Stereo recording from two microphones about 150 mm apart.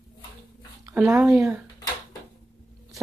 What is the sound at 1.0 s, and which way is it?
Speech, 5° right (ahead or behind).